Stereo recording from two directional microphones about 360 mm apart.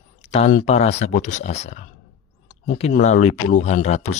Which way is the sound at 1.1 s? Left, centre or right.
Centre.